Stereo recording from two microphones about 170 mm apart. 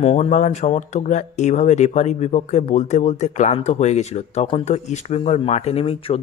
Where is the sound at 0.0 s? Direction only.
40° left (ahead or behind).